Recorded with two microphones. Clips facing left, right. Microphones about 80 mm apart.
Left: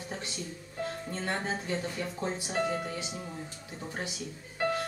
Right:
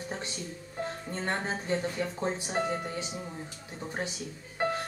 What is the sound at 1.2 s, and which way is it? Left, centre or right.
Speech, right.